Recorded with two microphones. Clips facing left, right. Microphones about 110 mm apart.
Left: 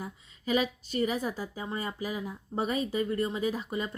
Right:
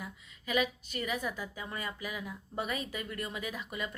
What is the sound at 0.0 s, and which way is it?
A woman's voice, 35° left (ahead or behind).